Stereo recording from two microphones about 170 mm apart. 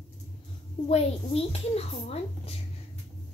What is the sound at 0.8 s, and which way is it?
Speech, 35° left (ahead or behind).